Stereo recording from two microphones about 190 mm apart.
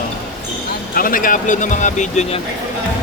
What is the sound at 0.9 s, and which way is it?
Speech, 45° left (ahead or behind).